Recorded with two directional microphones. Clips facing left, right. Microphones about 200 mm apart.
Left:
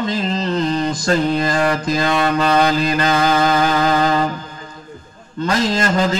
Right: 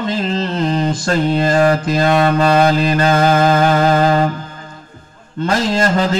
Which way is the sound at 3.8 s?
40° right (ahead or behind).